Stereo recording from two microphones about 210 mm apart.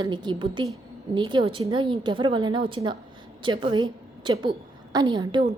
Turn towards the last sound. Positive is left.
turn(degrees=-20)  # may be behind; listen again after turning